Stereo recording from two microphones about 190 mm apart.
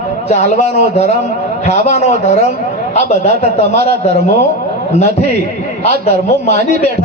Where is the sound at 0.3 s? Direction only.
35° left (ahead or behind).